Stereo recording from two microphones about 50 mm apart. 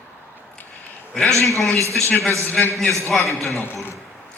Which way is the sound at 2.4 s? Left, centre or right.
Left.